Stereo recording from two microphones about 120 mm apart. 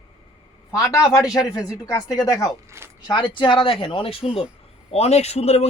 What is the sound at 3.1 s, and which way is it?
Speech, 40° left (ahead or behind).